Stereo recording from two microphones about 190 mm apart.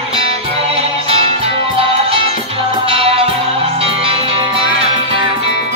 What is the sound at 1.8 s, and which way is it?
Music, 30° right (ahead or behind).